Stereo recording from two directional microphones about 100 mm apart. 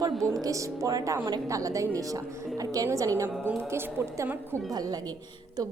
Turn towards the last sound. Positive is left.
turn(degrees=-25)  # may be behind; listen again after turning